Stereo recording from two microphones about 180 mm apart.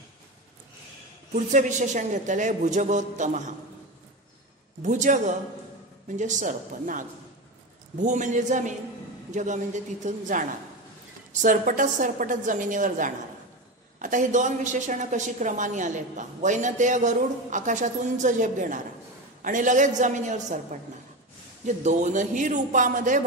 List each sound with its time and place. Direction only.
1.3 s a woman's voice: 40° right (ahead or behind)
4.8 s a woman's voice: 45° right (ahead or behind)
11.4 s a woman's voice: 45° right (ahead or behind)